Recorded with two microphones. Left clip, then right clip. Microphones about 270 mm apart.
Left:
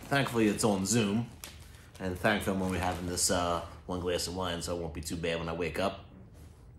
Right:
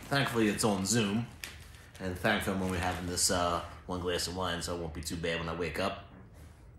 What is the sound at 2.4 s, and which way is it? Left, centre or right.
Speech, centre.